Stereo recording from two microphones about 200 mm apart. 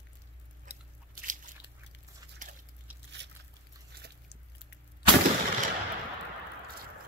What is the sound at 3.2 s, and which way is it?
Biting, 60° right (ahead or behind).